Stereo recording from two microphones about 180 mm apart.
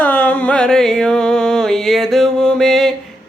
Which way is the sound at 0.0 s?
10° left (ahead or behind).